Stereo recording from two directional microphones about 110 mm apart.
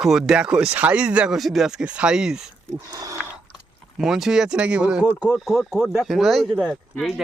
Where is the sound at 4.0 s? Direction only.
5° right (ahead or behind).